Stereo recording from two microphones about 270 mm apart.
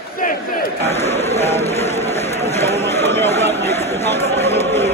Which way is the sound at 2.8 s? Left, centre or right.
Centre.